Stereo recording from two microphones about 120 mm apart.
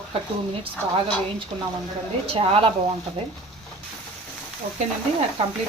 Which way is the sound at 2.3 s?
50° right (ahead or behind).